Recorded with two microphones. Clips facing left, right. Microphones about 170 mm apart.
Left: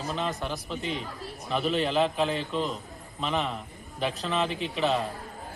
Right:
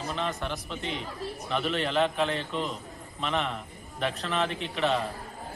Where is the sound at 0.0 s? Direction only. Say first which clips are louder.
Left 1 dB; centre (ahead or behind).